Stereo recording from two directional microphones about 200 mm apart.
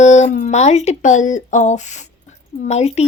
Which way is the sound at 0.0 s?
35° left (ahead or behind).